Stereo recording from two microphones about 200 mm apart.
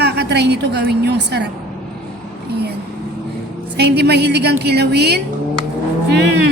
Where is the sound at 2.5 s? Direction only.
55° right (ahead or behind).